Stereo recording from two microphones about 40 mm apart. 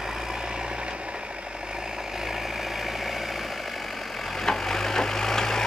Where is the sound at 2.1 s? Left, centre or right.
Centre.